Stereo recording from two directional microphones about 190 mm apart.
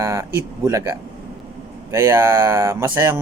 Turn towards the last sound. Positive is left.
turn(degrees=-15)  # may be behind; listen again after turning